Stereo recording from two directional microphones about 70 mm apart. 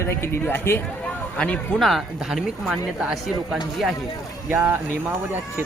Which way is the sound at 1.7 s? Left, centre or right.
Centre.